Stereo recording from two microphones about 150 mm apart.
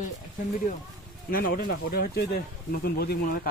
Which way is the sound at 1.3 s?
75° left (ahead or behind).